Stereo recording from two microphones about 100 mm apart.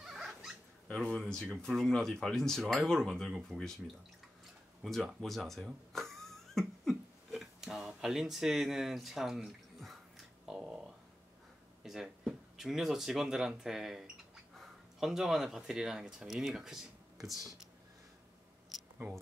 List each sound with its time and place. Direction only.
0.0 s dog: 5° right (ahead or behind)
0.8 s speech: 5° left (ahead or behind)
4.8 s music: centre (ahead or behind)
11.8 s a sound: 5° right (ahead or behind)
12.5 s speech: 5° right (ahead or behind)
19.0 s speech: 25° right (ahead or behind)